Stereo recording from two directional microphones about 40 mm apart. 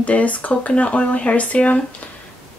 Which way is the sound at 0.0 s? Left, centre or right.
Left.